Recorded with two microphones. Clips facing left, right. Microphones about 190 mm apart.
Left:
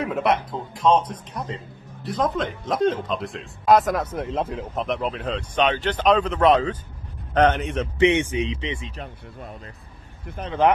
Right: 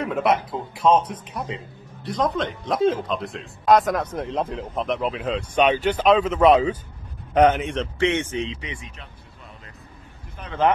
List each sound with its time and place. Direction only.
0.0 s a man's voice: centre (ahead or behind)
7.7 s a man's voice: 15° left (ahead or behind)
8.5 s speech: 25° left (ahead or behind)
8.9 s speech: 50° left (ahead or behind)